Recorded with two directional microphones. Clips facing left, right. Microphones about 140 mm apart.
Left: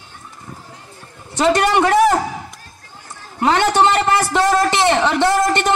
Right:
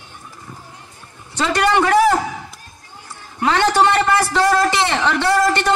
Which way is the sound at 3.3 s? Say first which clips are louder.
Left 1 dB; 20° left (ahead or behind).